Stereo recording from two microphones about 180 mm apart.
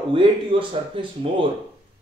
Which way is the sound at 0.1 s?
30° right (ahead or behind).